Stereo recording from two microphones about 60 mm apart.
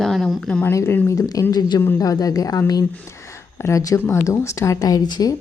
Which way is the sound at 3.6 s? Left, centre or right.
Left.